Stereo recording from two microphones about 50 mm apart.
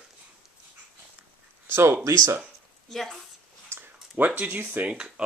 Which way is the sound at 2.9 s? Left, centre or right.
Centre.